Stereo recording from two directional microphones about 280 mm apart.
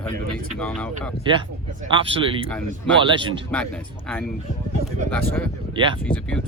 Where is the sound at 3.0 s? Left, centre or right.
Centre.